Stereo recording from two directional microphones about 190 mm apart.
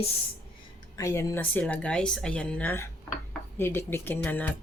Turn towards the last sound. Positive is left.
turn(degrees=10)  # may be behind; listen again after turning